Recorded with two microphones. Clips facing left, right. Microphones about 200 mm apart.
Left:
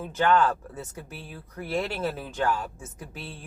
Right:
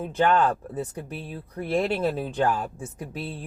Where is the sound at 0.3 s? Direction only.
35° right (ahead or behind).